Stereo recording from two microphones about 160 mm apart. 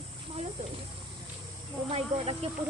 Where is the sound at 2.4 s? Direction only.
40° right (ahead or behind).